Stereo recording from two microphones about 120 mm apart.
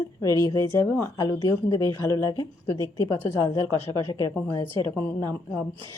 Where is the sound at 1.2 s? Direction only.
35° left (ahead or behind).